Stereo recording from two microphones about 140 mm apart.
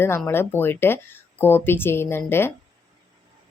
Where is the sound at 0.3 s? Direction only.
15° left (ahead or behind).